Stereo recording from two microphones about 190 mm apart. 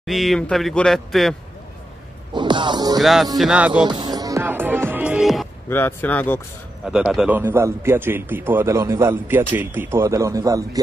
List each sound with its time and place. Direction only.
0.0 s speech: centre (ahead or behind)
2.3 s music: 25° right (ahead or behind)
3.0 s speech: centre (ahead or behind)
3.8 s speech: 20° right (ahead or behind); by 5.5 s centre (ahead or behind)
5.7 s speech: 10° left (ahead or behind)
6.9 s a man's voice: 5° right (ahead or behind)